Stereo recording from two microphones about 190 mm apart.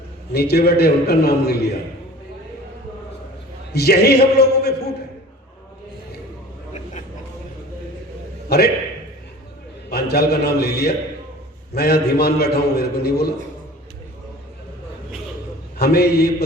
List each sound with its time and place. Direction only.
0.3 s a man's voice: 55° left (ahead or behind)
3.7 s a man's voice: 55° left (ahead or behind)
8.4 s a man's voice: 55° left (ahead or behind)
9.9 s a man's voice: 55° left (ahead or behind)
15.8 s a man's voice: 55° left (ahead or behind)